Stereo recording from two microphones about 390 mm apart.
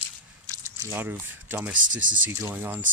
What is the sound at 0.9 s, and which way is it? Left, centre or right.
Speech, centre.